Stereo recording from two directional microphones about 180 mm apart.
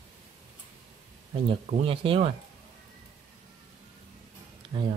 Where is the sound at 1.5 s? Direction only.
35° right (ahead or behind).